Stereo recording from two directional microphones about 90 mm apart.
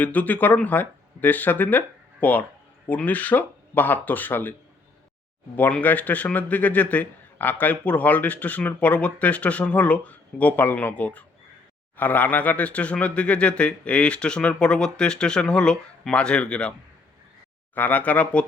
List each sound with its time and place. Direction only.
0.0 s speech: 20° left (ahead or behind)
5.5 s a man's voice: 20° left (ahead or behind)
17.7 s a man's voice: 20° left (ahead or behind)